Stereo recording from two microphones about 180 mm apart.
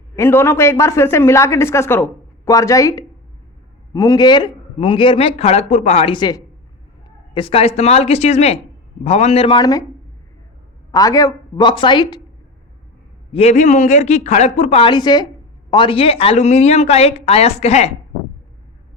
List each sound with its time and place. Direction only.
0.2 s a man's voice: 15° left (ahead or behind); by 6.1 s 35° left (ahead or behind)
6.1 s a man's voice: 20° left (ahead or behind)
10.9 s a man's voice: 20° left (ahead or behind)
13.3 s a woman's voice: 35° left (ahead or behind)